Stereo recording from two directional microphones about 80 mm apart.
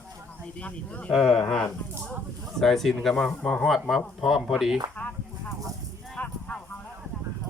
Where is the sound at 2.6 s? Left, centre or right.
Centre.